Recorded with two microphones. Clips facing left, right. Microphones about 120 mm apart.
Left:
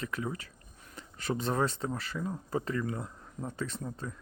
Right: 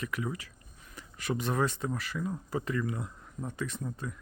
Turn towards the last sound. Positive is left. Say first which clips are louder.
# even
turn(degrees=30)  # may be behind; listen again after turning